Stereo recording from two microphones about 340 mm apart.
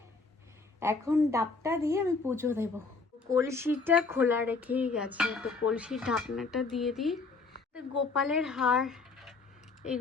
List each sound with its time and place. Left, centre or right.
0.8 s a woman's voice: centre